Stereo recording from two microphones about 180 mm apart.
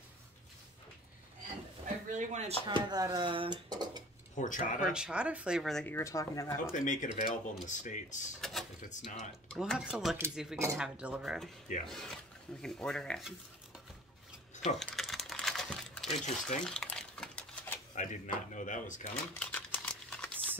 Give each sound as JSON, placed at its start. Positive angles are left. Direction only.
{"t": 2.1, "sound": "speech", "side_deg": -40}
{"t": 2.6, "sound": "speech", "side_deg": -25}
{"t": 4.4, "sound": "speech", "side_deg": 45}
{"t": 4.9, "sound": "speech", "side_deg": -5}
{"t": 5.9, "sound": "speech", "side_deg": 15}
{"t": 6.7, "sound": "speech", "side_deg": 45}
{"t": 8.4, "sound": "drawer open or close", "side_deg": 0}
{"t": 8.8, "sound": "speech", "side_deg": 40}
{"t": 9.5, "sound": "speech", "side_deg": 0}
{"t": 14.5, "sound": "a sound", "side_deg": 40}
{"t": 14.8, "sound": "typing", "side_deg": 0}
{"t": 16.2, "sound": "stir", "side_deg": 0}
{"t": 17.9, "sound": "speech", "side_deg": 45}
{"t": 19.3, "sound": "crumpling", "side_deg": 10}